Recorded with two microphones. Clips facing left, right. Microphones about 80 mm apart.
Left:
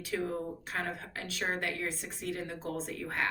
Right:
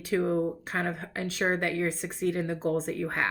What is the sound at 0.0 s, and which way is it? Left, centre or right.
A woman's voice, right.